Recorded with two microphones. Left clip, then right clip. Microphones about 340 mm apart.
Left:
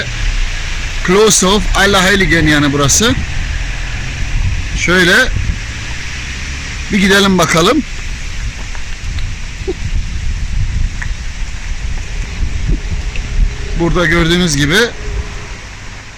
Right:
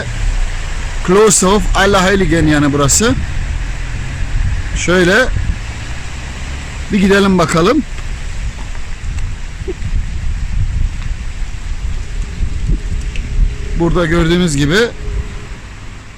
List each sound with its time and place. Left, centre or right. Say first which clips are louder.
1.0 s speech: even; centre
4.8 s speech: left 2 dB; centre
6.9 s speech: left 1 dB; centre
13.8 s speech: left 2 dB; centre